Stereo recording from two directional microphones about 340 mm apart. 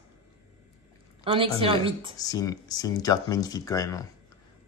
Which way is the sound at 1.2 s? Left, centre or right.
Centre.